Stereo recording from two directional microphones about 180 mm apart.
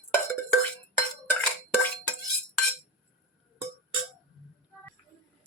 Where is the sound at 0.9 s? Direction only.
10° left (ahead or behind).